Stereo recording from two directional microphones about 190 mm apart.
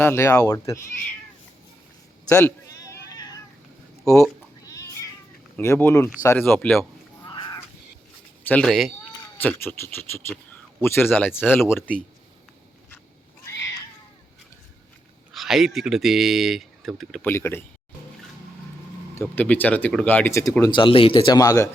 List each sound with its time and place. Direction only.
0.0 s speech: 15° left (ahead or behind)
2.3 s cat: 15° left (ahead or behind)
4.0 s speech: 15° left (ahead or behind)
4.7 s cat: 15° left (ahead or behind)
5.5 s speech: 10° left (ahead or behind)
7.3 s crow: 25° left (ahead or behind)
8.4 s speech: 5° left (ahead or behind)
13.4 s cat: 15° left (ahead or behind)
15.3 s speech: centre (ahead or behind)
17.2 s speech: 10° left (ahead or behind)
19.1 s speech: 10° left (ahead or behind)